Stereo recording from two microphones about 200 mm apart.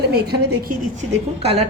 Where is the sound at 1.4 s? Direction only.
30° right (ahead or behind).